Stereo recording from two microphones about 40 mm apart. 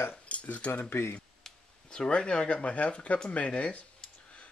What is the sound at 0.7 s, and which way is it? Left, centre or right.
Speech, left.